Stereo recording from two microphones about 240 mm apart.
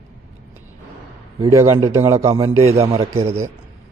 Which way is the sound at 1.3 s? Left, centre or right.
Centre.